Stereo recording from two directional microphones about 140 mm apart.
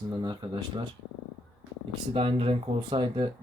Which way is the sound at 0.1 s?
30° right (ahead or behind).